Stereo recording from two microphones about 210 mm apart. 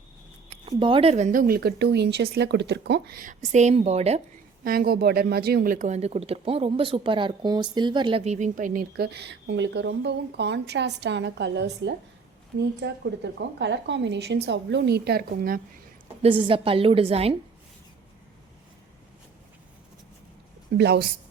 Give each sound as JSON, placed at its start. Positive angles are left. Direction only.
{"t": 0.5, "sound": "speech", "side_deg": -25}
{"t": 4.6, "sound": "speech", "side_deg": -45}
{"t": 16.2, "sound": "a woman's voice", "side_deg": -25}
{"t": 20.7, "sound": "speech", "side_deg": -50}